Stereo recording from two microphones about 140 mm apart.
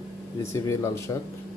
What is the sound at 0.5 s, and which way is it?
Speech, 20° left (ahead or behind).